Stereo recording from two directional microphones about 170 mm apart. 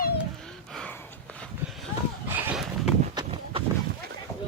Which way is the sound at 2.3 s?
10° right (ahead or behind).